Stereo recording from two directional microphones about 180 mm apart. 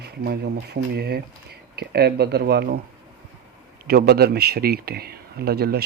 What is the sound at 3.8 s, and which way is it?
Speech, 60° right (ahead or behind).